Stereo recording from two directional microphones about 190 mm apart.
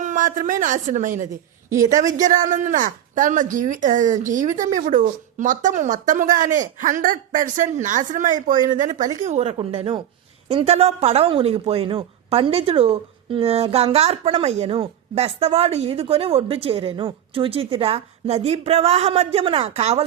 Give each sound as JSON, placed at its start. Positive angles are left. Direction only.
{"t": 0.0, "sound": "a woman's voice", "side_deg": -40}